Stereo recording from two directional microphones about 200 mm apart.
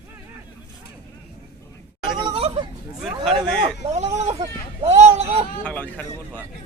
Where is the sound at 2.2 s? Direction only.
30° right (ahead or behind).